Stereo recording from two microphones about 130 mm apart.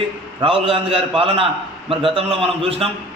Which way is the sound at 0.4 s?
45° right (ahead or behind).